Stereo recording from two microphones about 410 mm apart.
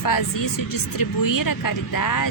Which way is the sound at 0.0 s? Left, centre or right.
Left.